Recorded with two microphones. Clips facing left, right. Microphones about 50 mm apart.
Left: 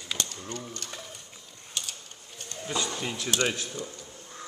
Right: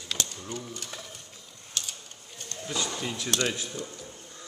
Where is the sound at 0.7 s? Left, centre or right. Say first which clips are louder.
Even; centre.